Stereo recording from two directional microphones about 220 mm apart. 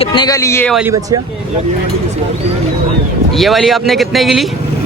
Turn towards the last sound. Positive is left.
turn(degrees=0)  # may be behind; listen again after turning